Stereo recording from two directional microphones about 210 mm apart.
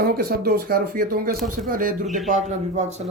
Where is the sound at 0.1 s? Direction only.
45° right (ahead or behind).